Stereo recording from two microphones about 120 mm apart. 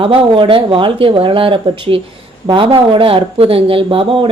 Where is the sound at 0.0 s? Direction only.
50° right (ahead or behind).